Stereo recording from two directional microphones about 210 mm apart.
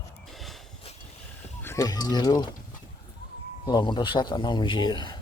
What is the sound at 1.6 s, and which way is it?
Speech, 15° left (ahead or behind).